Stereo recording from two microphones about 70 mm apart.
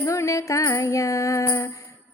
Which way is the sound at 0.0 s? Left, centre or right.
Left.